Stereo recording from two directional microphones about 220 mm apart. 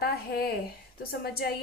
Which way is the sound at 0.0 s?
45° left (ahead or behind).